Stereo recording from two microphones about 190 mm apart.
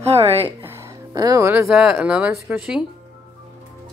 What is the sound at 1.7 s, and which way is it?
Speech, centre (ahead or behind).